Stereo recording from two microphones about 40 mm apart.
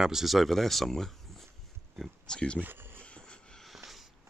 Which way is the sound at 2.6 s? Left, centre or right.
Right.